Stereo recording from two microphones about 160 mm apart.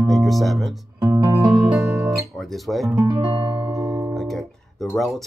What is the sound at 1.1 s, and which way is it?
Music, 20° right (ahead or behind).